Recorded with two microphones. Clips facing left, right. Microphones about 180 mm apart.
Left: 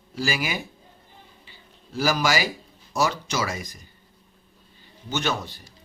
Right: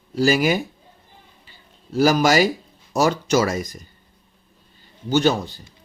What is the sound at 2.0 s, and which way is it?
Speech, 45° right (ahead or behind).